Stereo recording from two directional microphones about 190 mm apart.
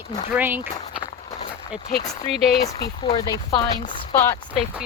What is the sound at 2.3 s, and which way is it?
Speech, centre (ahead or behind).